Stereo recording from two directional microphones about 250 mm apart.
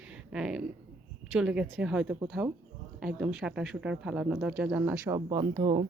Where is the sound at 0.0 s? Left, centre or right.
Centre.